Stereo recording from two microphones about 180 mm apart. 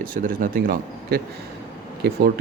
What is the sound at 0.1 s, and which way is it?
Speech, 50° right (ahead or behind).